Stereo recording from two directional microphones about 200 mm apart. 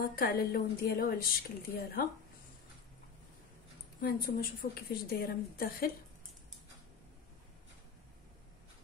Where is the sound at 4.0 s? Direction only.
50° left (ahead or behind).